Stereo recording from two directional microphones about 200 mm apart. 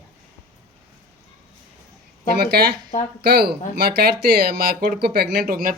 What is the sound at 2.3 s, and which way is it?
Speech, 55° right (ahead or behind).